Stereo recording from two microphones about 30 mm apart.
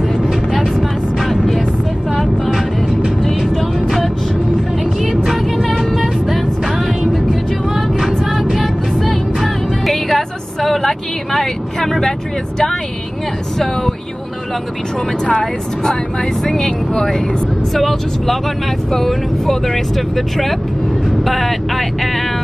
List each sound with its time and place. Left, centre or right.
0.6 s vehicle: centre
2.4 s vehicle: centre
3.2 s vehicle: centre
5.2 s music: centre
5.9 s vehicle: centre
8.5 s vehicle: centre
9.9 s music: centre
10.7 s vehicle: centre
16.5 s speech: centre
21.2 s vehicle: centre